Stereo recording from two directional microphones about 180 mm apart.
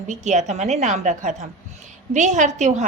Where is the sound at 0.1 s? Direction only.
40° right (ahead or behind).